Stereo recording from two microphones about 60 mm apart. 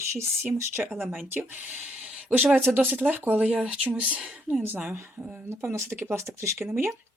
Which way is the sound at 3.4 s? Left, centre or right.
Centre.